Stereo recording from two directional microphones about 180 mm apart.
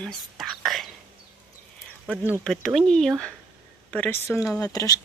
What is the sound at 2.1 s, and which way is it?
Speech, 10° right (ahead or behind).